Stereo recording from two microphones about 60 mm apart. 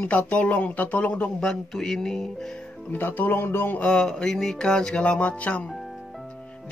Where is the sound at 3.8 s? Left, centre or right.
Centre.